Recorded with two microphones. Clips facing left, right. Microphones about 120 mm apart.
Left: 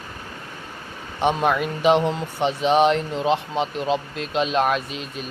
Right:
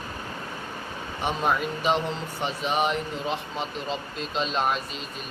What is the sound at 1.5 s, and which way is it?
Speech, 75° left (ahead or behind).